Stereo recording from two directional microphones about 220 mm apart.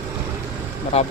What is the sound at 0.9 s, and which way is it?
Speech, 30° left (ahead or behind).